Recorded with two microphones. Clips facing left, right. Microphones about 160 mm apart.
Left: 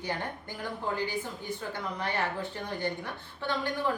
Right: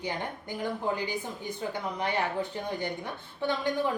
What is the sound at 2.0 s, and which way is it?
A woman's voice, 15° right (ahead or behind).